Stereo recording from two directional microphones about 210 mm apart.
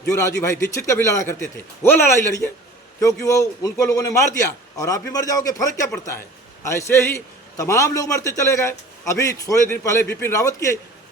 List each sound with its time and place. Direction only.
0.1 s a man's voice: 15° left (ahead or behind)